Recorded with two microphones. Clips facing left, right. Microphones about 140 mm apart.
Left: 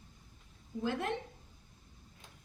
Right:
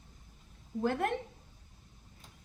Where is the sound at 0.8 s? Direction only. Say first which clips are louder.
Right 4 dB; 55° right (ahead or behind).